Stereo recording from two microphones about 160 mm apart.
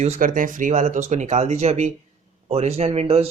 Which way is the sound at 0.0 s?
50° right (ahead or behind).